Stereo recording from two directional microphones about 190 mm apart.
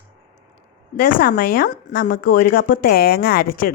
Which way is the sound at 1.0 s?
50° left (ahead or behind).